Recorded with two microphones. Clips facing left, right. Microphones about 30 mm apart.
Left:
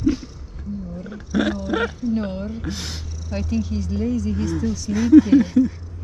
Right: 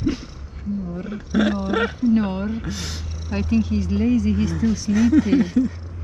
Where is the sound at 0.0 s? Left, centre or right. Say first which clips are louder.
Left 3 dB; right.